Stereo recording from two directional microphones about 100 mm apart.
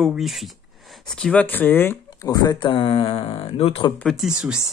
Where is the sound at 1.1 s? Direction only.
10° left (ahead or behind).